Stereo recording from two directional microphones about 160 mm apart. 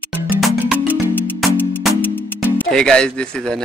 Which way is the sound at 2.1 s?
5° left (ahead or behind).